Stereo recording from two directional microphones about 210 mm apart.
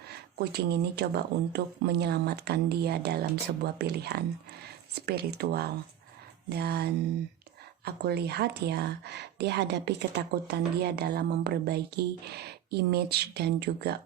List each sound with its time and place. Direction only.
0.1 s speech: 50° right (ahead or behind)